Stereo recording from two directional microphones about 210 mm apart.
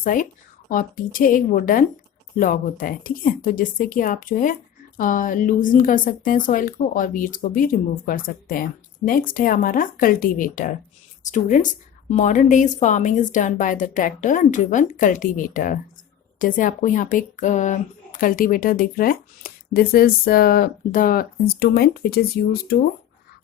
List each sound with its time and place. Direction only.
0.0 s a woman's voice: 40° left (ahead or behind)